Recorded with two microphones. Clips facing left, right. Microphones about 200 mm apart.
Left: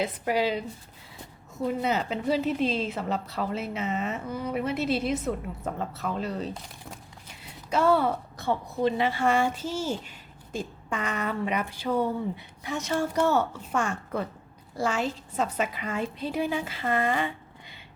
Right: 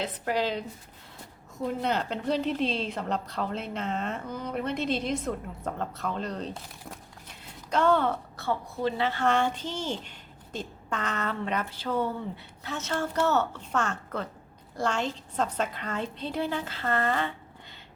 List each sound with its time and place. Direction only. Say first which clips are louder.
0.0 s a woman's voice: left 3 dB; 10° left (ahead or behind)
7.7 s a woman's voice: left 1 dB; 10° left (ahead or behind)